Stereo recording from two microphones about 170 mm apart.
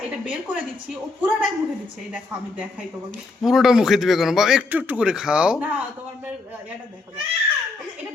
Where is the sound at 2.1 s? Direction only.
10° right (ahead or behind).